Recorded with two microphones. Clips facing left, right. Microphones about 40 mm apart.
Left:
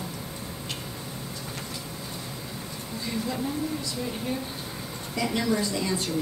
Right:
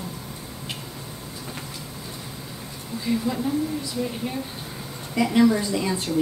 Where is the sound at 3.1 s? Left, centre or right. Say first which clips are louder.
Right 6 dB; centre.